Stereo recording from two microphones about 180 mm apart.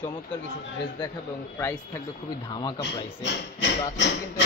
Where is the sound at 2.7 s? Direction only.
75° left (ahead or behind).